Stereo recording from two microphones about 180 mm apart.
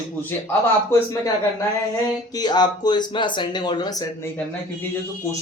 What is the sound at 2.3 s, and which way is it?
Speech, 25° left (ahead or behind).